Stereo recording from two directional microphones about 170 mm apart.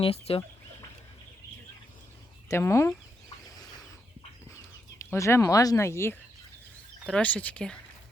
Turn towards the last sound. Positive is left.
turn(degrees=10)  # may be behind; listen again after turning